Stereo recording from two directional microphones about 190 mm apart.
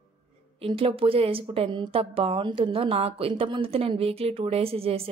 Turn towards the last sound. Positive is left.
turn(degrees=-30)  # may be behind; listen again after turning